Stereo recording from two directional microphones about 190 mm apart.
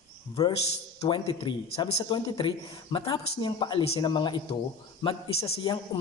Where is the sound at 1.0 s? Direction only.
25° left (ahead or behind).